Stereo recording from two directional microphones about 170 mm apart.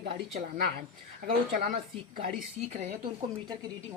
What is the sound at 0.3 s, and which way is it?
A woman's voice, 55° right (ahead or behind).